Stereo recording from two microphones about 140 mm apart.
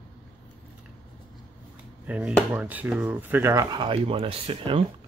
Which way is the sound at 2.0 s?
10° right (ahead or behind).